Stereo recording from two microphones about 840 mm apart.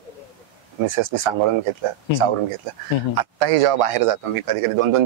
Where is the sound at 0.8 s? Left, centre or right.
Right.